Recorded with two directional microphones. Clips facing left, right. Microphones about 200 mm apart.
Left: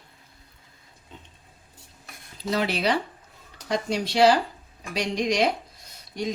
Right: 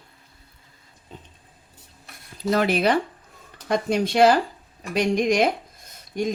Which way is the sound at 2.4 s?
50° right (ahead or behind).